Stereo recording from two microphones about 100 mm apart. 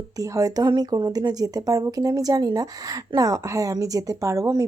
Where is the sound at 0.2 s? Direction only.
35° right (ahead or behind).